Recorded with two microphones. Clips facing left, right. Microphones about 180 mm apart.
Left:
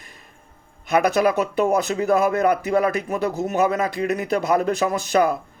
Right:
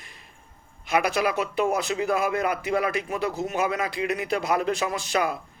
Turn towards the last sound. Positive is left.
turn(degrees=45)  # may be behind; listen again after turning